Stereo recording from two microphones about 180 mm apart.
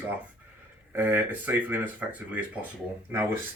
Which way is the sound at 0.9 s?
10° right (ahead or behind).